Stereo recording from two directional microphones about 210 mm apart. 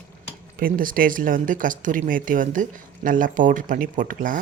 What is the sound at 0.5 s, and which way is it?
Speech, 40° right (ahead or behind).